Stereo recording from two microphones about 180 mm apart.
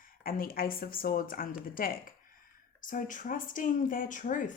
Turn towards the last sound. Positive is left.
turn(degrees=45)  # may be behind; listen again after turning